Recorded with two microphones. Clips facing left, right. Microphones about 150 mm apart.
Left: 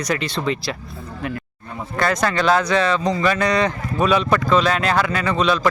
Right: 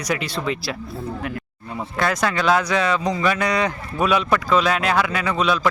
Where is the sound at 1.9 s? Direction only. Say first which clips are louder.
Left 2 dB; 5° right (ahead or behind).